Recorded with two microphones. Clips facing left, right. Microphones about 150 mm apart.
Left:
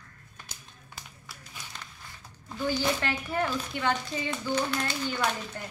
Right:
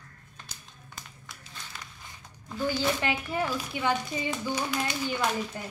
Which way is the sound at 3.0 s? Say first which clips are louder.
Even; 10° right (ahead or behind).